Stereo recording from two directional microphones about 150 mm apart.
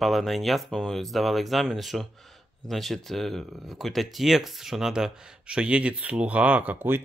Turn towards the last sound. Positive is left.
turn(degrees=-15)  # may be behind; listen again after turning